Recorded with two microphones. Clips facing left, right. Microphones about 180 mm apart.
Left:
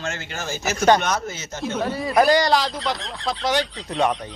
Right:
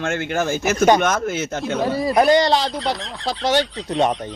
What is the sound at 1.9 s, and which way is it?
Speech, 35° right (ahead or behind).